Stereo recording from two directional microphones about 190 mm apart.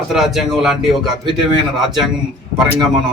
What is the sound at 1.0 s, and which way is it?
Speech, 25° right (ahead or behind).